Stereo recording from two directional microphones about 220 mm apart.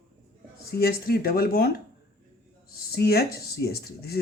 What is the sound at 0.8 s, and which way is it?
Speech, 45° left (ahead or behind).